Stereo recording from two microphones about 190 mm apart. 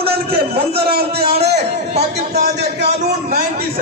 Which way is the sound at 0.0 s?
55° right (ahead or behind).